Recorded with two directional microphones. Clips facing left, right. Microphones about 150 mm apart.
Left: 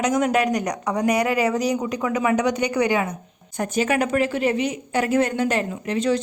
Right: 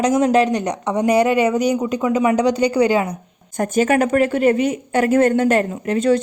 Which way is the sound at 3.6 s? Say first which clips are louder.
Right 5 dB; 45° right (ahead or behind).